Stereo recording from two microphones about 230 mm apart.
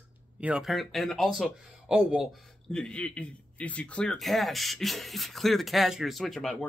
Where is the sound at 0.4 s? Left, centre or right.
Centre.